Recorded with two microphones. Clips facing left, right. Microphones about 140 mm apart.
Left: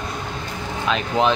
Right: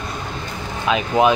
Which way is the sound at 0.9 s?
10° right (ahead or behind).